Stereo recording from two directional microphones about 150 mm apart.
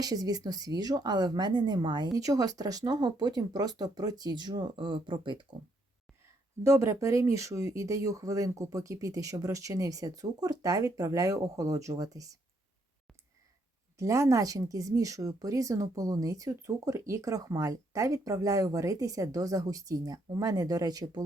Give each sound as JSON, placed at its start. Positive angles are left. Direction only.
{"t": 0.0, "sound": "speech", "side_deg": -25}
{"t": 6.6, "sound": "speech", "side_deg": -20}
{"t": 14.0, "sound": "speech", "side_deg": -20}